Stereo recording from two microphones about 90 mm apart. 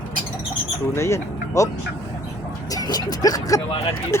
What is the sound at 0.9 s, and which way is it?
Speech, 30° left (ahead or behind).